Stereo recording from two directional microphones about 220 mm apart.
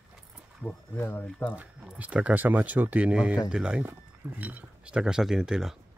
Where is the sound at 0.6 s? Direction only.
10° left (ahead or behind).